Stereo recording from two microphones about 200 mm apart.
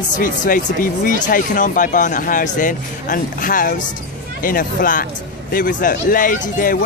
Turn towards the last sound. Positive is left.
turn(degrees=45)  # may be behind; listen again after turning